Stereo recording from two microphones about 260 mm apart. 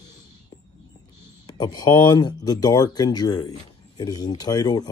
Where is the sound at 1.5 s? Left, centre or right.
Centre.